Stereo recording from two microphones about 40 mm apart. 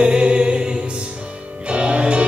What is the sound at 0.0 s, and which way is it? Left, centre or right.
Music, right.